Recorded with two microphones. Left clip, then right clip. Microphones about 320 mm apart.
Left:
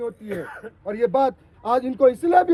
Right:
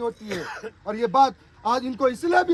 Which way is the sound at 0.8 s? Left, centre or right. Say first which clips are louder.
Right 1 dB; centre.